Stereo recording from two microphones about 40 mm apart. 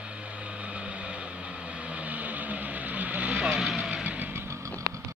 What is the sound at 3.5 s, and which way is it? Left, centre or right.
Vehicle, centre.